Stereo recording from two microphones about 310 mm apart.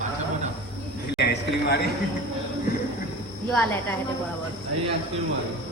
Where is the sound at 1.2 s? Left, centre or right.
Left.